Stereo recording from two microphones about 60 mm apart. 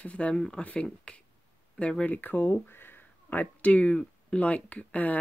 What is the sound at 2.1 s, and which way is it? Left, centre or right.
Speech, left.